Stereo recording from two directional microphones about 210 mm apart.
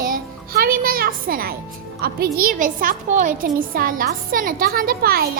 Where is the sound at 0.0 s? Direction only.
45° right (ahead or behind).